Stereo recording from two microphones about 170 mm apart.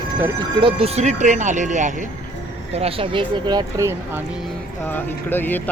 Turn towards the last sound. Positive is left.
turn(degrees=10)  # may be behind; listen again after turning